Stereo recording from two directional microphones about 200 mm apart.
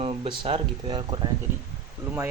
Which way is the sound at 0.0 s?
30° right (ahead or behind).